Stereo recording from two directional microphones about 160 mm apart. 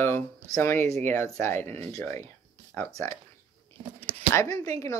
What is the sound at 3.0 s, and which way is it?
Speech, 15° left (ahead or behind).